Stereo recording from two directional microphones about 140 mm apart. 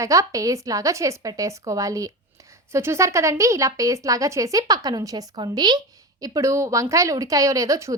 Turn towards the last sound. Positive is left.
turn(degrees=-20)  # may be behind; listen again after turning